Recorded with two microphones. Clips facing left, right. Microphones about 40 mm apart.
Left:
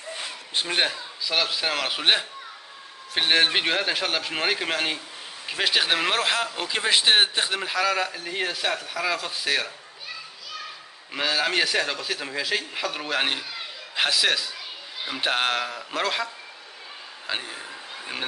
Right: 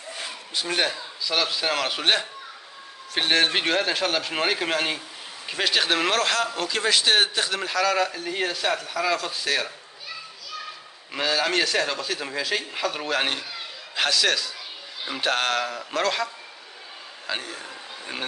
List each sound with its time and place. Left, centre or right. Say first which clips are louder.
0.7 s a man's voice: even; centre
0.9 s a man's voice: even; centre
11.1 s a man's voice: even; centre
17.3 s a man's voice: even; centre